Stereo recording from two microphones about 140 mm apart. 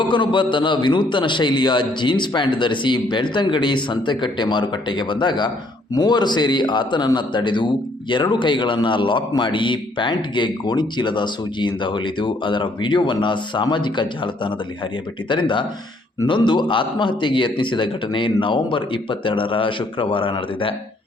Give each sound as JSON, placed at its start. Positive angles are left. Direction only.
{"t": 0.0, "sound": "a man's voice", "side_deg": 35}